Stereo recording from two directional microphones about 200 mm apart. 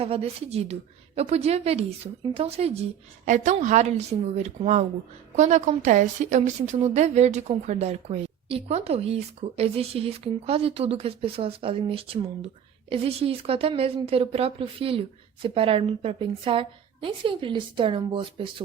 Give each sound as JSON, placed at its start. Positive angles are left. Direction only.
{"t": 0.0, "sound": "a woman's voice", "side_deg": -30}